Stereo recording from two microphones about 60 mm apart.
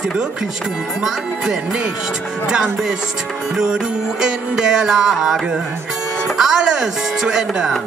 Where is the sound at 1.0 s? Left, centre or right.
Centre.